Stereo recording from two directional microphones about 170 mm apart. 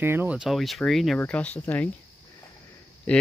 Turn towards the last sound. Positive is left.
turn(degrees=5)  # may be behind; listen again after turning